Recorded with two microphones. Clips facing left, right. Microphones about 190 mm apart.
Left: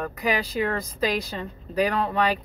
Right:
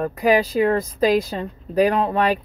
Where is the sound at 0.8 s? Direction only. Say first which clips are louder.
Right 8 dB; 50° right (ahead or behind).